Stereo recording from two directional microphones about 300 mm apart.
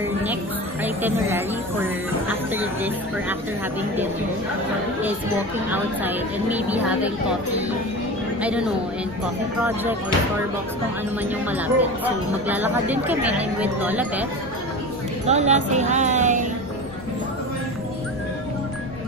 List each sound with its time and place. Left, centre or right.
0.8 s speech: centre
5.7 s speech: centre
8.4 s speech: centre
11.2 s speech: centre
15.2 s speech: right